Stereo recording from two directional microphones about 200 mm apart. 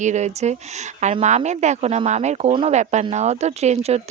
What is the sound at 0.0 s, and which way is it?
Speech, 35° right (ahead or behind).